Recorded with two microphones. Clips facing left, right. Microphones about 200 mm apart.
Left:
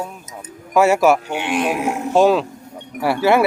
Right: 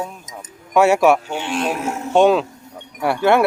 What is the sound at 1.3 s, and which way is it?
Speech, 15° left (ahead or behind).